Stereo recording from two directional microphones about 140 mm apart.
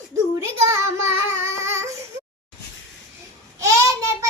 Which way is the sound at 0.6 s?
20° right (ahead or behind).